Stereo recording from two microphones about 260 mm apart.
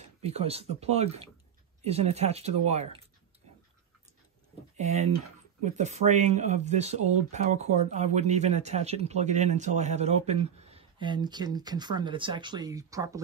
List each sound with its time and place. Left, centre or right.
0.2 s speech: right
4.7 s speech: right